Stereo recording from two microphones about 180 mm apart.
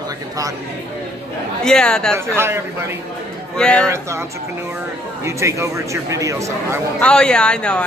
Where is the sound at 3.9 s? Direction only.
15° right (ahead or behind).